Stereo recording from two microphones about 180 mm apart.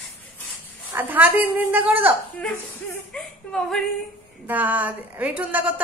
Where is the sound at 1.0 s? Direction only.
10° right (ahead or behind).